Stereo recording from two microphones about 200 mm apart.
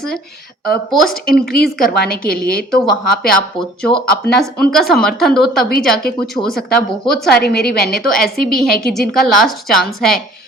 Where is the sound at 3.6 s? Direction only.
25° left (ahead or behind).